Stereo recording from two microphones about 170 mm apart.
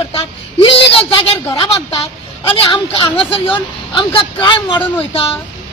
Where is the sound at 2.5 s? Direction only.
30° left (ahead or behind).